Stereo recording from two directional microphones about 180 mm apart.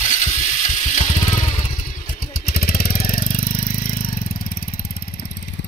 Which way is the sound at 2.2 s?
55° left (ahead or behind).